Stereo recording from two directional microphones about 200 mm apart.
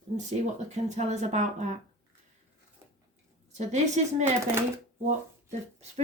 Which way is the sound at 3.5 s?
35° right (ahead or behind).